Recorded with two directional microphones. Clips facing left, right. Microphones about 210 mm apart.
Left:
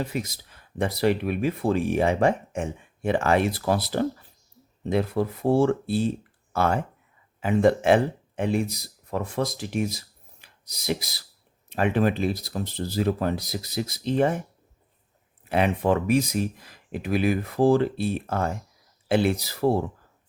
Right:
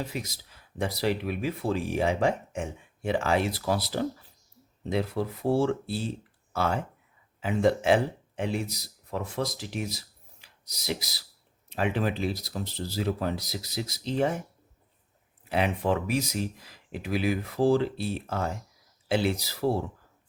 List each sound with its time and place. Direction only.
0.0 s speech: 55° left (ahead or behind)
15.4 s speech: 55° left (ahead or behind)